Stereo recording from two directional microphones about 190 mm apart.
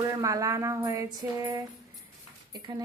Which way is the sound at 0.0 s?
15° right (ahead or behind).